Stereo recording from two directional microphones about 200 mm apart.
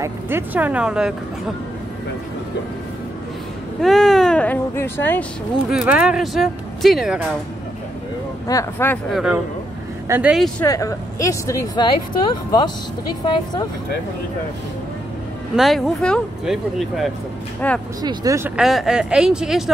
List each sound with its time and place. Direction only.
0.0 s speech: 10° right (ahead or behind)
3.8 s speech: centre (ahead or behind)
5.7 s speech: 5° right (ahead or behind)
8.5 s speech: 15° left (ahead or behind)
9.1 s speech: 5° right (ahead or behind)
10.6 s speech: 15° left (ahead or behind)
15.5 s speech: centre (ahead or behind)
18.0 s speech: 15° right (ahead or behind)
18.6 s speech: centre (ahead or behind)